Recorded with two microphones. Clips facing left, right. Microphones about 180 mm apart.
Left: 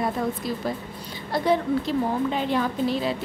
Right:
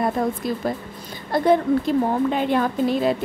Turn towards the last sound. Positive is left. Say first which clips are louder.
# right 4 dB
turn(degrees=-50)  # may be behind; listen again after turning